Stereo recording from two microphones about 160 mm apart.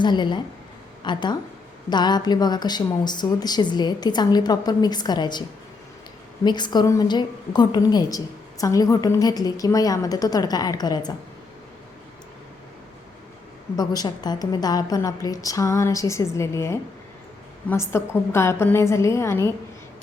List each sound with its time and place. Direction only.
0.0 s a woman's voice: 30° left (ahead or behind)
6.4 s a woman's voice: 25° left (ahead or behind)
13.7 s a woman's voice: 25° left (ahead or behind)